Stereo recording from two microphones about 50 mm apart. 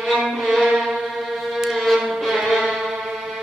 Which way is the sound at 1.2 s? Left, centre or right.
Centre.